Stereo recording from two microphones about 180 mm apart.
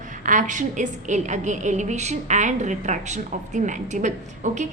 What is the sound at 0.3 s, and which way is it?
A woman's voice, 45° right (ahead or behind).